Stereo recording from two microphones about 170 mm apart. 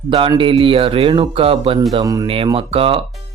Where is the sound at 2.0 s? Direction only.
20° right (ahead or behind).